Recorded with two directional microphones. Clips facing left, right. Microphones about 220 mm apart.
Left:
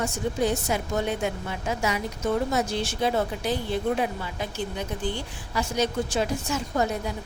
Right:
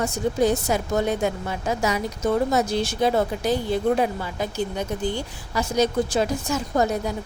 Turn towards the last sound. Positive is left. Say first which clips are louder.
# right 4 dB
turn(degrees=-40)  # may be behind; listen again after turning